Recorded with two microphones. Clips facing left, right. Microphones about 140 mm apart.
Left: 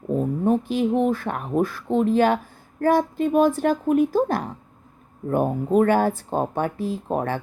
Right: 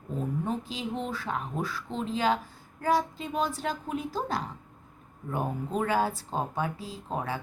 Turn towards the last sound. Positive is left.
turn(degrees=55)  # may be behind; listen again after turning